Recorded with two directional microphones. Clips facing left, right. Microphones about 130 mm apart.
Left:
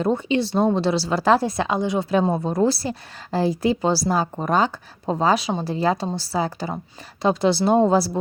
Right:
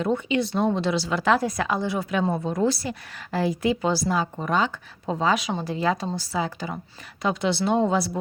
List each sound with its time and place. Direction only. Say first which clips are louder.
0.0 s a woman's voice: left 3 dB; 35° left (ahead or behind)
2.4 s a woman's voice: left 3 dB; 35° left (ahead or behind)